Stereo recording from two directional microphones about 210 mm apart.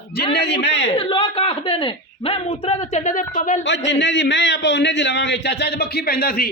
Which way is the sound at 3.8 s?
55° left (ahead or behind).